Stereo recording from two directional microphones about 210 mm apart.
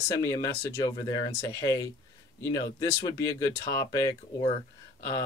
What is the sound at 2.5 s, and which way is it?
Speech, 20° left (ahead or behind).